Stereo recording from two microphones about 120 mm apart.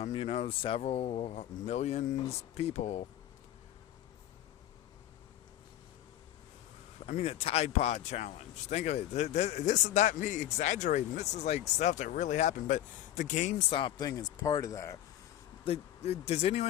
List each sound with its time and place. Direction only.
0.0 s speech: 50° left (ahead or behind); by 3.1 s 70° left (ahead or behind)
7.0 s speech: 60° left (ahead or behind); by 13.6 s 90° left
13.7 s speech: 45° left (ahead or behind); by 14.9 s 25° left (ahead or behind)
15.6 s speech: 55° left (ahead or behind)